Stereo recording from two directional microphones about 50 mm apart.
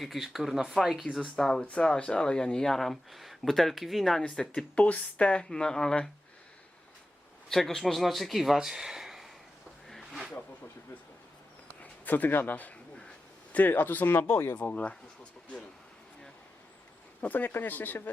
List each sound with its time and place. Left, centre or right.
0.0 s speech: centre
1.4 s speech: centre
4.7 s speech: left
7.5 s speech: centre
9.8 s a sound: centre
11.8 s a man's voice: left
14.7 s a sound: left
17.2 s speech: left